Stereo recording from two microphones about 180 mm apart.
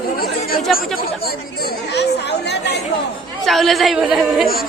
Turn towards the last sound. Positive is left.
turn(degrees=0)  # may be behind; listen again after turning